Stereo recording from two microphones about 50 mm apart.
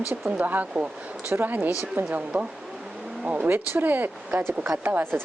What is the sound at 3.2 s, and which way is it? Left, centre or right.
Speech, right.